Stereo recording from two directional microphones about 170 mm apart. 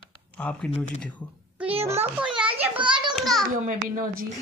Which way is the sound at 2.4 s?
5° right (ahead or behind).